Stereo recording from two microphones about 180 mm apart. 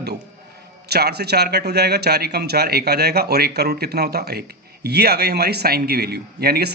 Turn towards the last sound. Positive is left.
turn(degrees=-60)  # may be behind; listen again after turning